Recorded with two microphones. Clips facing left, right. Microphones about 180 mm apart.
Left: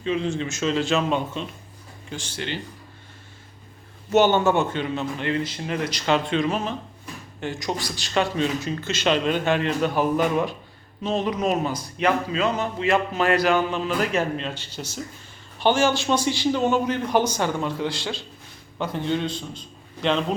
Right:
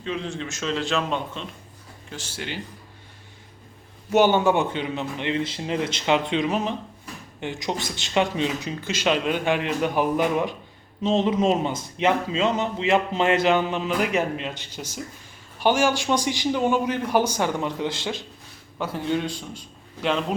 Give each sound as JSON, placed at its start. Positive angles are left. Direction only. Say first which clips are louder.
{"t": 0.0, "sound": "a man's voice", "louder": "left 5 dB", "side_deg": 0}
{"t": 4.1, "sound": "a man's voice", "louder": "even", "side_deg": -10}
{"t": 18.8, "sound": "speech", "louder": "even", "side_deg": -5}